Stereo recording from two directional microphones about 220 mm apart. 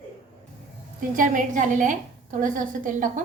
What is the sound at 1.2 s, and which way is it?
A woman's voice, 35° right (ahead or behind).